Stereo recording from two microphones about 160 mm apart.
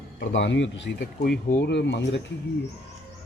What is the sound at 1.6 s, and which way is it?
Speech, 90° left.